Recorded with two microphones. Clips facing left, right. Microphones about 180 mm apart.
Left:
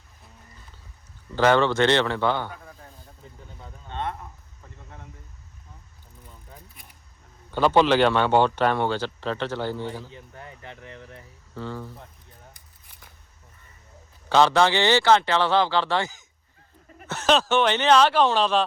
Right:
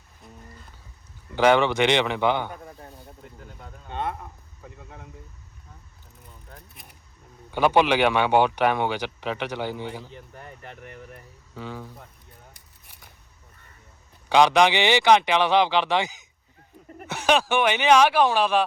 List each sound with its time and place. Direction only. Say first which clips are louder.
1.4 s speech: even; 15° right (ahead or behind)
3.8 s speech: right 1 dB; 5° right (ahead or behind)
7.5 s speech: left 1 dB; 15° right (ahead or behind)
10.0 s speech: even; centre (ahead or behind)
14.3 s speech: right 1 dB; 15° right (ahead or behind)